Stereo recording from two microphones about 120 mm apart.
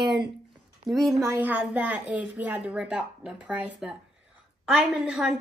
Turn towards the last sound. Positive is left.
turn(degrees=-5)  # may be behind; listen again after turning